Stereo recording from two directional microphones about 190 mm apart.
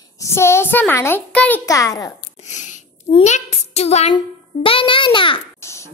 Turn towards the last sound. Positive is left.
turn(degrees=15)  # may be behind; listen again after turning